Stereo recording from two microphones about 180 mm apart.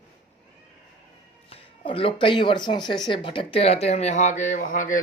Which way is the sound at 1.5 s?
30° left (ahead or behind).